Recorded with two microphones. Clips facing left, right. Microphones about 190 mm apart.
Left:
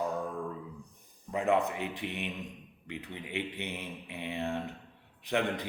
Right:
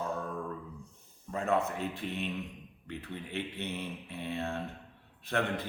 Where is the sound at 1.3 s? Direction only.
15° left (ahead or behind).